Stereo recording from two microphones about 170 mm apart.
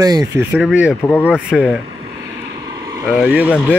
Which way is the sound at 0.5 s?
5° right (ahead or behind).